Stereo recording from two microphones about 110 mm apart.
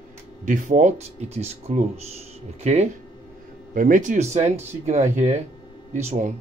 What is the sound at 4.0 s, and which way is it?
Speech, 90° right.